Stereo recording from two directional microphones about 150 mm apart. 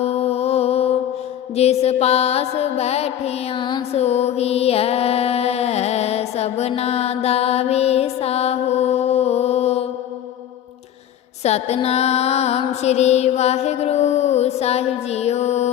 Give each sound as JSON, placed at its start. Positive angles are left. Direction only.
{"t": 0.0, "sound": "music", "side_deg": 45}
{"t": 1.5, "sound": "mantra", "side_deg": 45}
{"t": 3.9, "sound": "mantra", "side_deg": 45}
{"t": 11.4, "sound": "mantra", "side_deg": 45}